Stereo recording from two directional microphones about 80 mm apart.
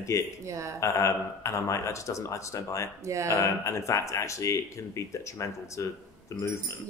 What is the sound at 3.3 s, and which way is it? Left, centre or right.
Speech, left.